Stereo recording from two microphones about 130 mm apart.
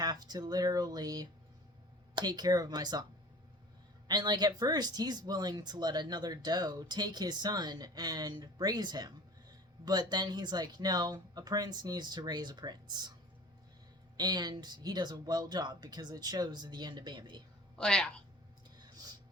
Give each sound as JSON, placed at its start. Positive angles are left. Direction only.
{"t": 0.0, "sound": "speech", "side_deg": -30}
{"t": 4.1, "sound": "speech", "side_deg": -30}
{"t": 14.2, "sound": "speech", "side_deg": -30}
{"t": 17.7, "sound": "a woman's voice", "side_deg": 5}
{"t": 18.8, "sound": "a sound", "side_deg": -30}